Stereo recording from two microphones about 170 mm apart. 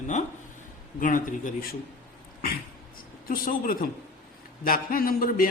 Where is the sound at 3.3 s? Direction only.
55° left (ahead or behind).